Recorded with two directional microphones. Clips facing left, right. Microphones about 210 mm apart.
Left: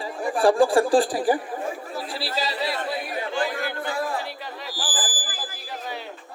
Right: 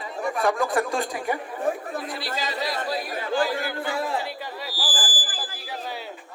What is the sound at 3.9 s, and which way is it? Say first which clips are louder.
Speech: even; 20° right (ahead or behind).